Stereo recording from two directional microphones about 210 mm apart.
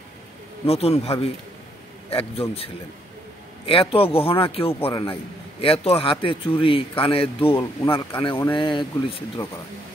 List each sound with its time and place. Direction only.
0.7 s speech: 30° left (ahead or behind)
3.6 s speech: 25° left (ahead or behind)